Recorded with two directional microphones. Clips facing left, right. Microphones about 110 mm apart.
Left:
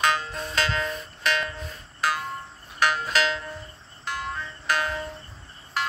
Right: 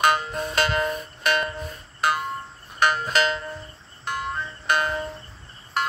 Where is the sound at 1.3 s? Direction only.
50° right (ahead or behind).